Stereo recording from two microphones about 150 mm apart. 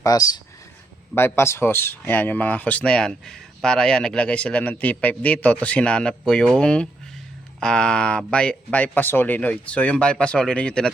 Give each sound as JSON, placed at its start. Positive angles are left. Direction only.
{"t": 0.0, "sound": "speech", "side_deg": 25}